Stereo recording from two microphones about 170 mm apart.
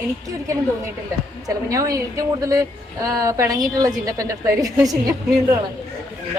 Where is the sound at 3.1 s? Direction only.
20° right (ahead or behind).